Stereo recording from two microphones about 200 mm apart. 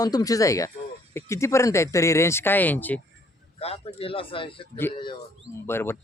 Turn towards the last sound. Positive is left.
turn(degrees=10)  # may be behind; listen again after turning